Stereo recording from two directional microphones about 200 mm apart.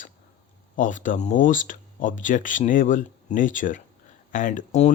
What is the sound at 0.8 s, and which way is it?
Speech, 40° left (ahead or behind).